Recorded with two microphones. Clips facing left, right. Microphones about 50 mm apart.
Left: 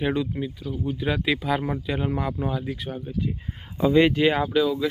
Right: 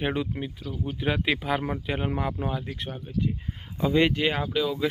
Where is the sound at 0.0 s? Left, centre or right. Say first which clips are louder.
Left 3 dB; centre.